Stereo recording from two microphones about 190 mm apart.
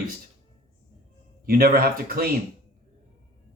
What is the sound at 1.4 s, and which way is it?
Speech, 50° right (ahead or behind).